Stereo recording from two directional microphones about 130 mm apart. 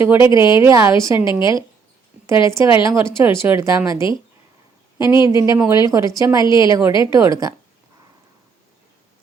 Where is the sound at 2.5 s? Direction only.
20° right (ahead or behind).